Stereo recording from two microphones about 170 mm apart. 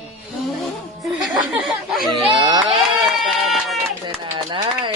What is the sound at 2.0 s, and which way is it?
Speech, 30° right (ahead or behind).